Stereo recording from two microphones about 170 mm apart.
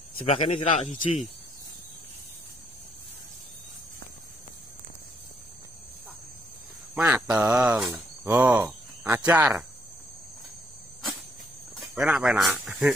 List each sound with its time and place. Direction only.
0.3 s speech: 35° left (ahead or behind)
7.0 s speech: 5° right (ahead or behind)
11.8 s speech: 5° right (ahead or behind)